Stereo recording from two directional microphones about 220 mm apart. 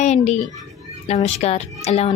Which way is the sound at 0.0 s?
30° left (ahead or behind).